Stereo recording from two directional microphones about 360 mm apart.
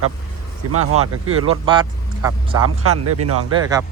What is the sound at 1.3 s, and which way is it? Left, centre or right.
Speech, centre.